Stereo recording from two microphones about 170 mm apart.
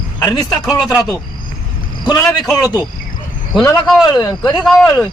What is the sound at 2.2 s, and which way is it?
Speech, centre (ahead or behind).